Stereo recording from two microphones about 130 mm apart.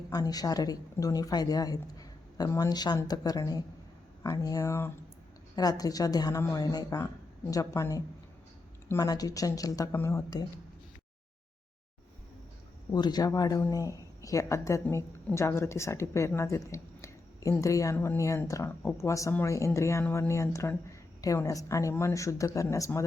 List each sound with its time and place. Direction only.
0.1 s a woman's voice: 30° left (ahead or behind)
12.9 s a woman's voice: 30° left (ahead or behind)